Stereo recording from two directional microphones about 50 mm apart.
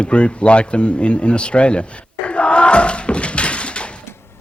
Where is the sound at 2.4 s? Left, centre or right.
Left.